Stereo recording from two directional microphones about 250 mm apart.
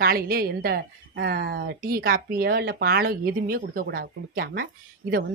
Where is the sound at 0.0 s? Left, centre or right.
Right.